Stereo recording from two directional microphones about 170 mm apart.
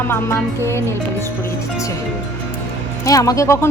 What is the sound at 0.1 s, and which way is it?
Speech, 15° left (ahead or behind).